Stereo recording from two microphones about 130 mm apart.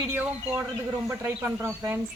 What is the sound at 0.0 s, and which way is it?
Speech, 15° right (ahead or behind).